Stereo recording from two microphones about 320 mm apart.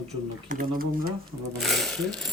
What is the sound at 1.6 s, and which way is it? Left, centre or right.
Speech, centre.